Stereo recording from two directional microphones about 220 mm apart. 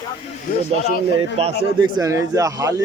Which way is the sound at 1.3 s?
25° right (ahead or behind).